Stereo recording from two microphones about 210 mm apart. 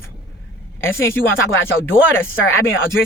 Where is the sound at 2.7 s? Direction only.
70° left (ahead or behind).